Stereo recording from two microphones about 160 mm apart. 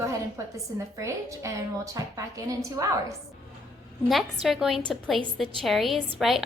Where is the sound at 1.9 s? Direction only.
20° right (ahead or behind).